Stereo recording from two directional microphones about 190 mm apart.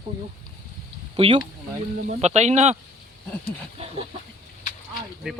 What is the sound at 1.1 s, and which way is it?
Speech, 30° right (ahead or behind).